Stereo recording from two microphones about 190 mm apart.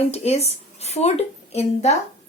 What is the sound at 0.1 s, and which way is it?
Speech, 35° left (ahead or behind).